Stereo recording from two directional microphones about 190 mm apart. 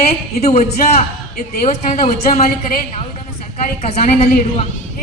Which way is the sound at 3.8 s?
35° left (ahead or behind).